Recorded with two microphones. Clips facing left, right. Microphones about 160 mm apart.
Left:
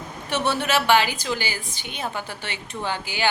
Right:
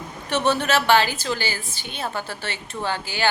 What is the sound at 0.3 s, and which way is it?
A woman's voice, 10° left (ahead or behind).